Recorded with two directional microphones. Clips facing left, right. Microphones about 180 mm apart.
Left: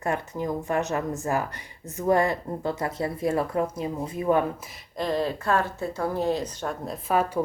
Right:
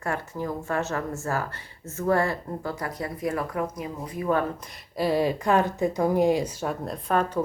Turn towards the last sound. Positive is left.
turn(degrees=5)  # may be behind; listen again after turning